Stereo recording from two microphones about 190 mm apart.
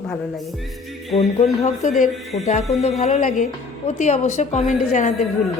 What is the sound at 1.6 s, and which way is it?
Music, 45° left (ahead or behind).